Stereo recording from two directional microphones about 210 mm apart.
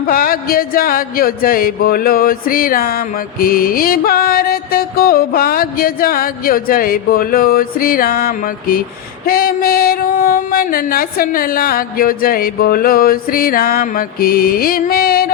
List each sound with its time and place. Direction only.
0.1 s speech: 45° left (ahead or behind)